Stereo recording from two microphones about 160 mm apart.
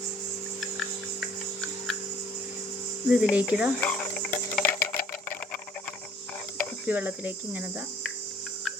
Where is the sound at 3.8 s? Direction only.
5° left (ahead or behind).